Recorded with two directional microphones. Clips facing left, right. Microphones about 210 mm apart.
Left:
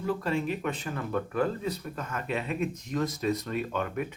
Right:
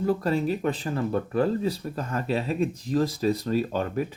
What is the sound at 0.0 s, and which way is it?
Speech, 40° right (ahead or behind).